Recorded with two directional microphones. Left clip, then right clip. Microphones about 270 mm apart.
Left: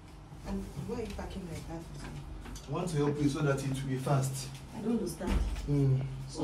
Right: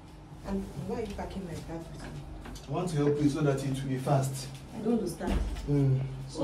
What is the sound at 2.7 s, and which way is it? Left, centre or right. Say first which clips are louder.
A man's voice: right 3 dB; centre.